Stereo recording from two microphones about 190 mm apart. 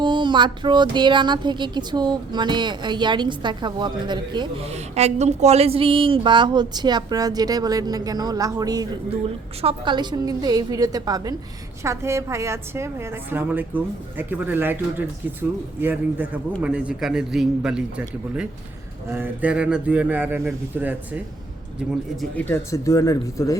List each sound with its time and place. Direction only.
0.0 s speech: 25° right (ahead or behind)
4.7 s speech: 35° right (ahead or behind); by 8.9 s 20° right (ahead or behind)
9.2 s a woman's voice: 30° right (ahead or behind); by 18.0 s 5° right (ahead or behind)
19.1 s a woman's voice: 10° right (ahead or behind)
22.2 s speech: 10° left (ahead or behind)